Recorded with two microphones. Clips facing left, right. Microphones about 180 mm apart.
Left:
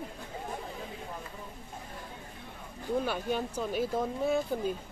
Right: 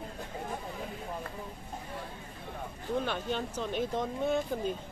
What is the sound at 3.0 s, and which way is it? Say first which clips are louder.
Speech: left 2 dB; 10° left (ahead or behind).